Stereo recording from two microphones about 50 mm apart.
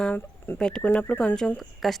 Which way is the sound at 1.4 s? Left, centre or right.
Centre.